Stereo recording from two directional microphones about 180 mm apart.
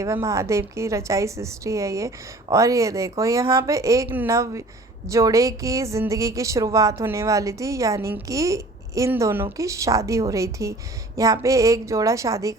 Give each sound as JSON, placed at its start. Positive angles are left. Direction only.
{"t": 0.0, "sound": "a woman's voice", "side_deg": -15}